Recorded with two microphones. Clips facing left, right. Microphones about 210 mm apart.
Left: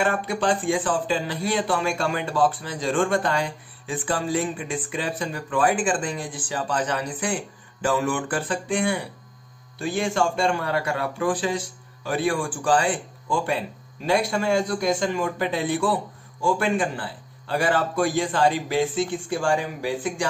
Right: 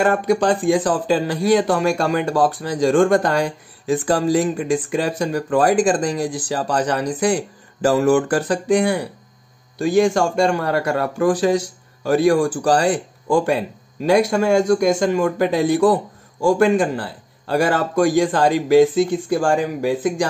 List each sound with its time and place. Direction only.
0.0 s a man's voice: 40° right (ahead or behind)